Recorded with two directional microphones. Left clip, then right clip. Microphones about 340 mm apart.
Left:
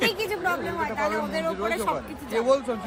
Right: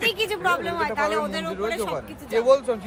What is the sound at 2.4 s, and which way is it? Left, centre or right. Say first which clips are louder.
Speech: right 4 dB; right.